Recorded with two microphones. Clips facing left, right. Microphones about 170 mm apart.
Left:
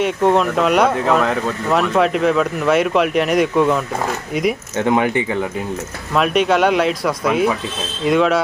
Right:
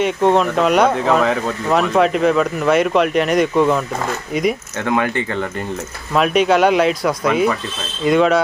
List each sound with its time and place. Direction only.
0.0 s speech: centre (ahead or behind)
4.8 s speech: 20° left (ahead or behind)
6.1 s speech: centre (ahead or behind)